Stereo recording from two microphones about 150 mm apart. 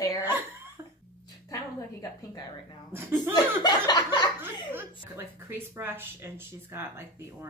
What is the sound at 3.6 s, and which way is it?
Speech, 30° left (ahead or behind).